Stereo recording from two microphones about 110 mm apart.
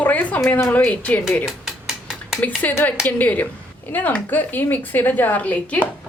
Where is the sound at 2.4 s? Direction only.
15° left (ahead or behind).